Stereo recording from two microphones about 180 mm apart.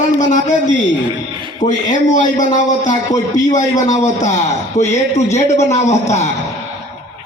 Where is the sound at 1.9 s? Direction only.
45° left (ahead or behind).